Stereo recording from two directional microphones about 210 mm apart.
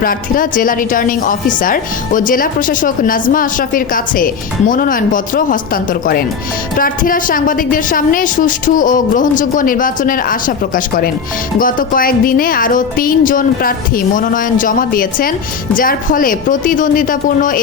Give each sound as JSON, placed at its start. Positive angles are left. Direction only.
{"t": 0.0, "sound": "speech", "side_deg": 40}